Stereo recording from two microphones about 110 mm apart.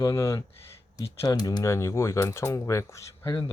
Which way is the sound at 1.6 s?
25° left (ahead or behind).